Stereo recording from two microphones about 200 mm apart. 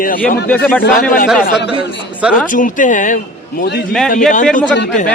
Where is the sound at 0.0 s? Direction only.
45° left (ahead or behind).